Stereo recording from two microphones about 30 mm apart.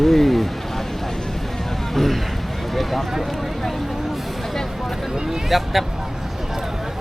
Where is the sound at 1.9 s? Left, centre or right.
Centre.